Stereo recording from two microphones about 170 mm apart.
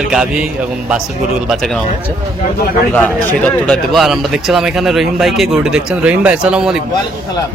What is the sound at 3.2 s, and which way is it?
Speech, 10° left (ahead or behind).